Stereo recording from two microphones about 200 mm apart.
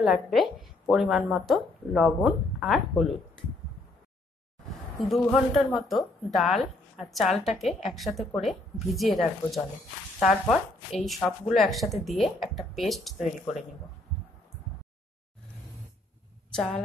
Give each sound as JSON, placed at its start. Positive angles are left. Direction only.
{"t": 0.0, "sound": "a woman's voice", "side_deg": 0}
{"t": 4.9, "sound": "a woman's voice", "side_deg": 0}
{"t": 16.5, "sound": "a woman's voice", "side_deg": 5}